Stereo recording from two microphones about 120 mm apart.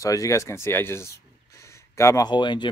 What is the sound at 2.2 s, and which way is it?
Speech, 40° left (ahead or behind).